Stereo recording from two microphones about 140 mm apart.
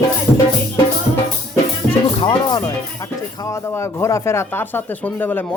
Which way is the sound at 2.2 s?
30° left (ahead or behind).